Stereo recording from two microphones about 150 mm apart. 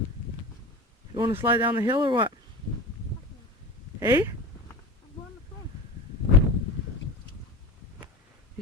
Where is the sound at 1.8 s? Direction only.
30° right (ahead or behind).